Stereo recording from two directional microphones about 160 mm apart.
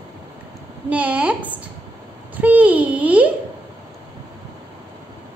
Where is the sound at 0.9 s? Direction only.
10° right (ahead or behind).